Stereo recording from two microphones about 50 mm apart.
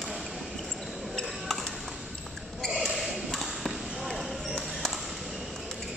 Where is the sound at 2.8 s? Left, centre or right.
Centre.